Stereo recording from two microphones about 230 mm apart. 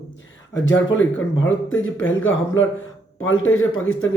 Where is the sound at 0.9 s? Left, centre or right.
Left.